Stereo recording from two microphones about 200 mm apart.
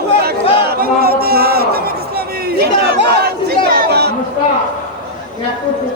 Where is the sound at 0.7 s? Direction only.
50° right (ahead or behind).